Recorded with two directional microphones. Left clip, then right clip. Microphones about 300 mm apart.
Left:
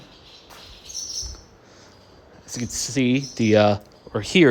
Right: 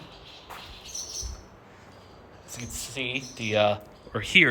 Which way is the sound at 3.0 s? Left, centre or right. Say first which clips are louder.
Left 8 dB; left.